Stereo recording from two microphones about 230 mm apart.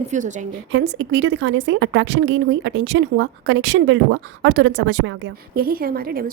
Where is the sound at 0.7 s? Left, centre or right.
Right.